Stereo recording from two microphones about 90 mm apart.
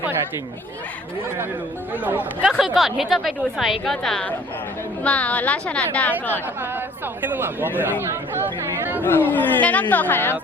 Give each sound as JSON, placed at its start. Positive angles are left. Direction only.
{"t": 1.9, "sound": "speech", "side_deg": -20}
{"t": 2.7, "sound": "a woman's voice", "side_deg": 0}
{"t": 7.2, "sound": "speech", "side_deg": -20}
{"t": 9.0, "sound": "a woman's voice", "side_deg": 20}